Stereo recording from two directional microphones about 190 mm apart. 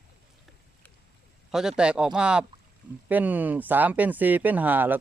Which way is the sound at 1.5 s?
5° right (ahead or behind).